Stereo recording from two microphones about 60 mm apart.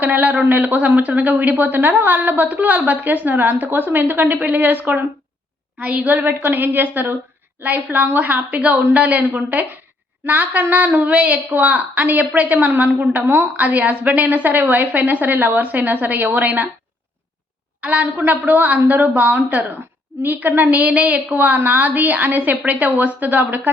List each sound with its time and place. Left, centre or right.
0.0 s a woman's voice: right
17.7 s a woman's voice: right